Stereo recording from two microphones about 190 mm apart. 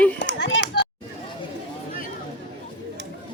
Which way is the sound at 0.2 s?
65° left (ahead or behind).